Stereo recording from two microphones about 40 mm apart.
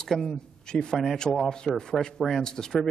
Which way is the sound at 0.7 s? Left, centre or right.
Left.